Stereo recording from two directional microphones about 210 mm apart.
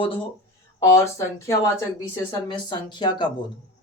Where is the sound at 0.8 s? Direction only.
15° left (ahead or behind).